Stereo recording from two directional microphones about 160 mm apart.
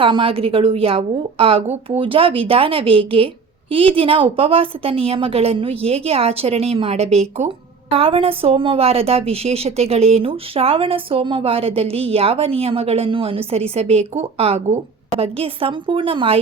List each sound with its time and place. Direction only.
0.0 s a woman's voice: 35° right (ahead or behind)